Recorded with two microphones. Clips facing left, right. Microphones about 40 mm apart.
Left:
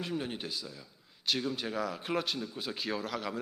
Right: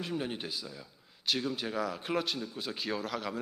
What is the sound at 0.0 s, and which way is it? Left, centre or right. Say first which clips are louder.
Speech: right 1 dB; centre.